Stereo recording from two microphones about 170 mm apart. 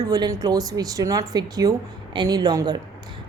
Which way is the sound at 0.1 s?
20° right (ahead or behind).